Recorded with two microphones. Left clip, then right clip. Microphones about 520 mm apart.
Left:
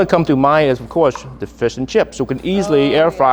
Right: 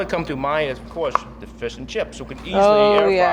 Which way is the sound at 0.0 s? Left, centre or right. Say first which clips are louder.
Left 10 dB; left.